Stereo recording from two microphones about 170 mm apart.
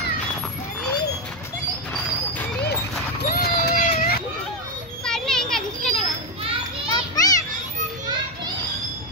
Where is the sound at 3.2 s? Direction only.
65° left (ahead or behind).